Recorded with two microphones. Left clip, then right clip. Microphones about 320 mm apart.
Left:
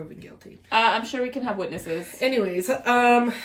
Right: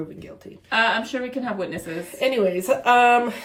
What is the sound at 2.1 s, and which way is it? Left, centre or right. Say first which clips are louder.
Speech: right 2 dB; right.